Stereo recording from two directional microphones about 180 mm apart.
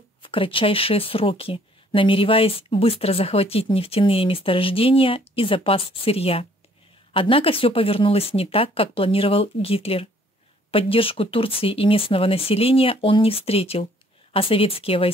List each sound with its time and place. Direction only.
0.2 s speech: 30° left (ahead or behind)